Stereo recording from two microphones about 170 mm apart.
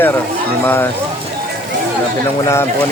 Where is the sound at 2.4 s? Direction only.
15° left (ahead or behind).